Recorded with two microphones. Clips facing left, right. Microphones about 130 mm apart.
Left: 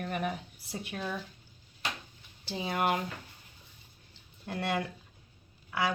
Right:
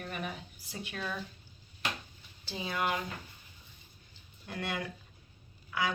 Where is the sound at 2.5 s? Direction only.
55° left (ahead or behind).